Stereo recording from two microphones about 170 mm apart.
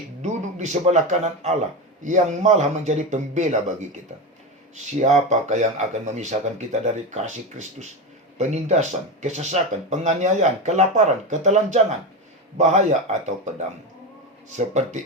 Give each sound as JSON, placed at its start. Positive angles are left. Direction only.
{"t": 0.2, "sound": "speech", "side_deg": -45}
{"t": 6.7, "sound": "speech", "side_deg": -45}